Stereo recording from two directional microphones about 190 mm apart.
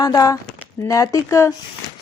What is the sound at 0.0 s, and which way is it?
A woman's voice, 20° left (ahead or behind).